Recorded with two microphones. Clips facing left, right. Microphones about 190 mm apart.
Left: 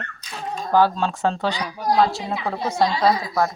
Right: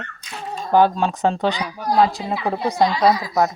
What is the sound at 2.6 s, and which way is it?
Speech, 20° right (ahead or behind).